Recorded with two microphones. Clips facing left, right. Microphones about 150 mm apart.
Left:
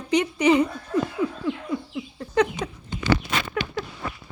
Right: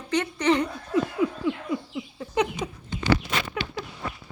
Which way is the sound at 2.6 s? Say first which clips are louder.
Left 1 dB; 15° right (ahead or behind).